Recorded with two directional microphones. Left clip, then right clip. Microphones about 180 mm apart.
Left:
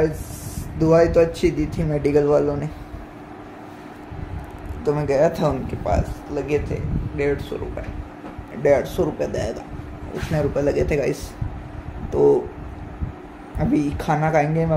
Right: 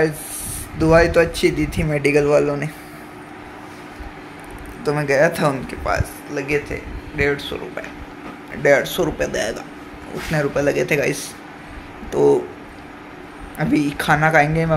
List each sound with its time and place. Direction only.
0.7 s speech: 10° left (ahead or behind)
4.8 s speech: 10° left (ahead or behind)
8.6 s speech: 10° left (ahead or behind)
13.6 s speech: 5° left (ahead or behind)